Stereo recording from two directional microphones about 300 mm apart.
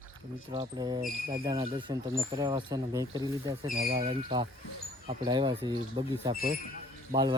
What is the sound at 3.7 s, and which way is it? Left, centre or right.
Speech, right.